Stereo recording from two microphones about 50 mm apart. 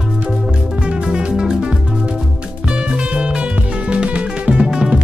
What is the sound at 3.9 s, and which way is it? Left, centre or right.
Music, right.